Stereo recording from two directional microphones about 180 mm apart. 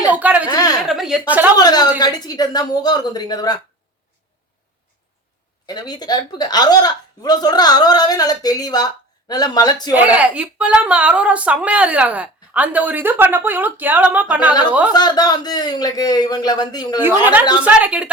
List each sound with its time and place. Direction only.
0.1 s a sound: 10° right (ahead or behind)
0.9 s speech: centre (ahead or behind)
1.5 s a woman's voice: 20° left (ahead or behind)
5.6 s a woman's voice: 20° left (ahead or behind)
9.9 s speech: 10° right (ahead or behind)
14.9 s a woman's voice: 20° left (ahead or behind)
17.0 s speech: 10° right (ahead or behind)